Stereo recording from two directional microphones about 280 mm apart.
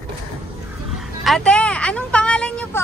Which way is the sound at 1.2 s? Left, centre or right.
Centre.